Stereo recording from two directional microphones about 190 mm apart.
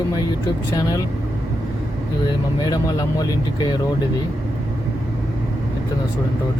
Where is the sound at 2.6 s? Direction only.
20° left (ahead or behind).